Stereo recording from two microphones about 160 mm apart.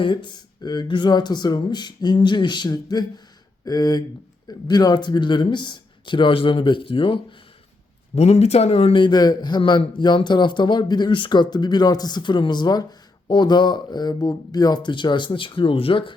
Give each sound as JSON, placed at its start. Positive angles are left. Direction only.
{"t": 0.0, "sound": "a man's voice", "side_deg": 30}